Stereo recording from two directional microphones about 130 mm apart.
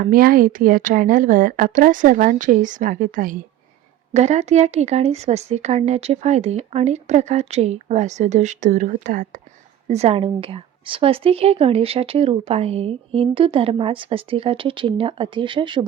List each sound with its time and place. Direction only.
0.0 s a woman's voice: 90° right
4.1 s speech: 60° right (ahead or behind); by 9.4 s 85° right
9.9 s a woman's voice: 50° right (ahead or behind)